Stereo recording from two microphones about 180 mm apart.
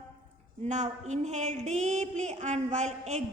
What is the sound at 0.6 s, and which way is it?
A woman's voice, 40° right (ahead or behind).